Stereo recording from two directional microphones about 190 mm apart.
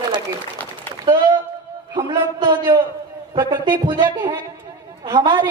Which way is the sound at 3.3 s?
25° right (ahead or behind).